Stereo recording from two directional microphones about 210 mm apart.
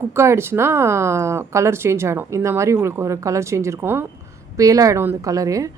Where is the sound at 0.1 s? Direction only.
10° right (ahead or behind).